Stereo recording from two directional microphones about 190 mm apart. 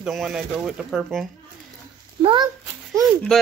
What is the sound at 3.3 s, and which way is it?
Speech, centre (ahead or behind).